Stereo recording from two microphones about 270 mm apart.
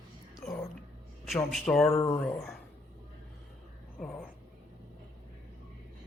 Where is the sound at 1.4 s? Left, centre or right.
Centre.